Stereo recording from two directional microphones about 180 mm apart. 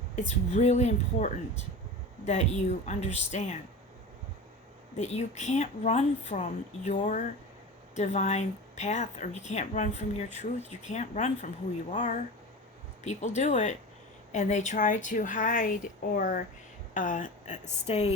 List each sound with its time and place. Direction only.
0.2 s speech: 40° left (ahead or behind)
4.9 s a woman's voice: 40° left (ahead or behind)